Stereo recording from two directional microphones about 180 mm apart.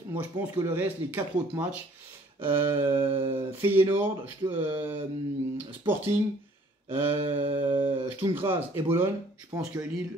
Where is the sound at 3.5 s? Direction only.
10° right (ahead or behind).